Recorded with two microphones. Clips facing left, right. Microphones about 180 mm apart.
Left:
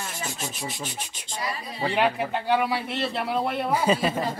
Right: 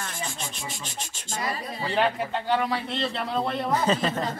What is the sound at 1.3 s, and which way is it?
Speech, 50° right (ahead or behind).